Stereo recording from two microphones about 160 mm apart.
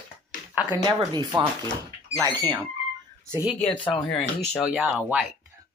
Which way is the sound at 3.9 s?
5° left (ahead or behind).